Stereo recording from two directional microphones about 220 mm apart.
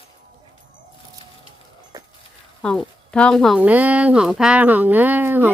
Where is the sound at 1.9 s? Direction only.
15° right (ahead or behind).